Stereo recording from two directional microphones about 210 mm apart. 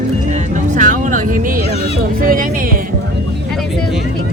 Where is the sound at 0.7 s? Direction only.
40° right (ahead or behind).